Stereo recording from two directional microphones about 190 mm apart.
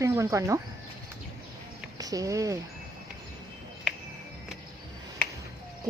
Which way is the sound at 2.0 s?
20° right (ahead or behind).